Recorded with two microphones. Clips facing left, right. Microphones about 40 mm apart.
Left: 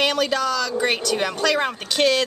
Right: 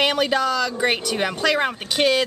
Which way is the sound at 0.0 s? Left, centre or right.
Centre.